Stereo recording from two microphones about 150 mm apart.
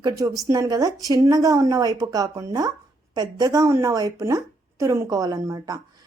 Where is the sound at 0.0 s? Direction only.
20° right (ahead or behind).